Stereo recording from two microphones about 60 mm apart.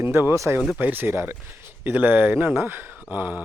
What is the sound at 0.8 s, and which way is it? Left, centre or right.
Speech, right.